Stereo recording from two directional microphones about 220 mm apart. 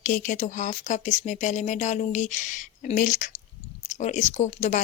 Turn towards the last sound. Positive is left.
turn(degrees=30)  # may be behind; listen again after turning